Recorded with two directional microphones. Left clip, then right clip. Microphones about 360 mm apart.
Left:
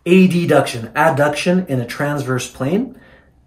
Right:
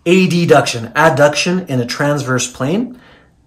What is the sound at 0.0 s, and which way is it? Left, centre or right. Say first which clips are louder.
Speech: right 1 dB; centre.